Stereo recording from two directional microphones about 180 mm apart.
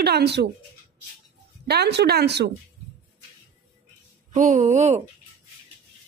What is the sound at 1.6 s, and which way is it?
Speech, 65° right (ahead or behind).